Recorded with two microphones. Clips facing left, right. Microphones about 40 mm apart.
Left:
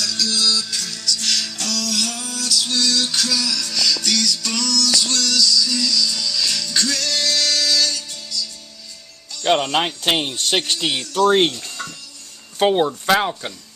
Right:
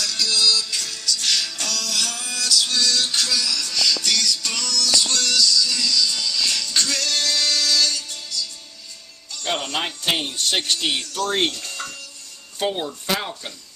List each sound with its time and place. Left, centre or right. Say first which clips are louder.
0.3 s music: right 2 dB; centre
2.9 s music: left 1 dB; centre
3.3 s music: left 1 dB; centre
6.9 s music: left 1 dB; right
9.4 s speech: left 7 dB; left
10.6 s speech: left 1 dB; centre
11.1 s speech: left 11 dB; left
11.4 s speech: left 3 dB; centre
11.7 s music: left 1 dB; centre
12.5 s speech: left 8 dB; left
13.1 s speech: left 8 dB; left